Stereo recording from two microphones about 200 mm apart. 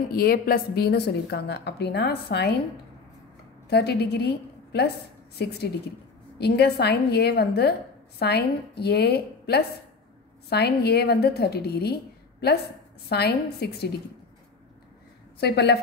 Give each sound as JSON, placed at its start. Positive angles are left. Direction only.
{"t": 0.1, "sound": "a woman's voice", "side_deg": 50}
{"t": 3.6, "sound": "a woman's voice", "side_deg": 55}
{"t": 6.3, "sound": "a woman's voice", "side_deg": 55}
{"t": 15.4, "sound": "a woman's voice", "side_deg": 55}